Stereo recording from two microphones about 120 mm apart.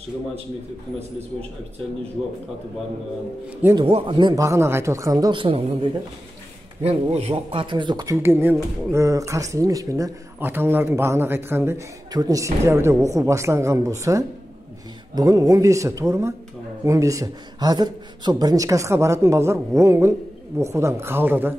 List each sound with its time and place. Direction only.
3.8 s speech: 50° right (ahead or behind)
4.4 s a man's voice: 25° right (ahead or behind)
5.3 s speech: 45° right (ahead or behind)
6.8 s speech: 60° right (ahead or behind)
7.6 s speech: 40° right (ahead or behind)
8.2 s a man's voice: 20° right (ahead or behind)
10.4 s a man's voice: 15° right (ahead or behind)
12.1 s a man's voice: 30° right (ahead or behind)